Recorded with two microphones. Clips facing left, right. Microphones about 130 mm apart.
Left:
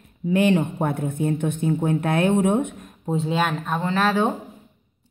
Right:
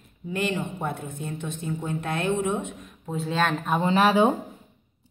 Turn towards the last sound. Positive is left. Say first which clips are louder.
# right 1 dB
turn(degrees=-15)  # may be behind; listen again after turning